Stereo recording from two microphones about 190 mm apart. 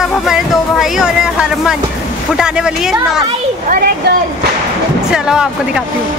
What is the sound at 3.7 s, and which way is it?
Speech, 55° right (ahead or behind).